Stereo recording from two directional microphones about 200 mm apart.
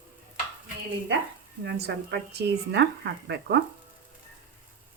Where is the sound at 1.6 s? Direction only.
55° right (ahead or behind).